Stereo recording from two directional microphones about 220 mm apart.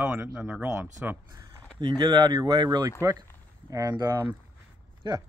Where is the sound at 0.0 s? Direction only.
5° right (ahead or behind).